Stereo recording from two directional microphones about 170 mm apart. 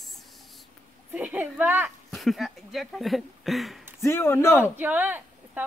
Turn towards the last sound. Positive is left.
turn(degrees=-10)  # may be behind; listen again after turning